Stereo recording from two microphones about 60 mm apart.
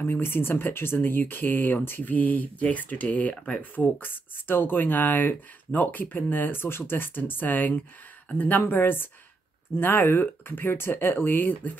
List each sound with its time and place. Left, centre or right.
0.0 s speech: left